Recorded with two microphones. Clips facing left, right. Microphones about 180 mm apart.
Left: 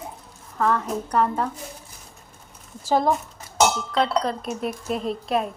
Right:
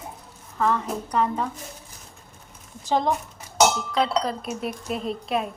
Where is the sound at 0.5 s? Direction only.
Centre (ahead or behind).